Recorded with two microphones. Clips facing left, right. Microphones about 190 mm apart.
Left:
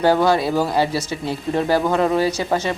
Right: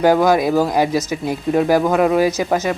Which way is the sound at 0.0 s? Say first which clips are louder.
Right 3 dB; 10° right (ahead or behind).